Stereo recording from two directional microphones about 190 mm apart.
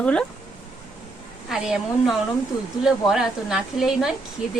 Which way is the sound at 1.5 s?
Centre (ahead or behind).